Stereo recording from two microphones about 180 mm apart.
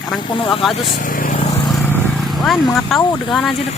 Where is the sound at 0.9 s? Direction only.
50° left (ahead or behind).